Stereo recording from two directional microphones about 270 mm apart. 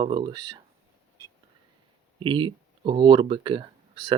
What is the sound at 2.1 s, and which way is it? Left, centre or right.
Speech, centre.